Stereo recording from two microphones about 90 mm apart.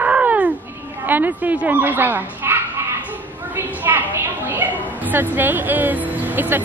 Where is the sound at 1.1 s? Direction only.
20° right (ahead or behind).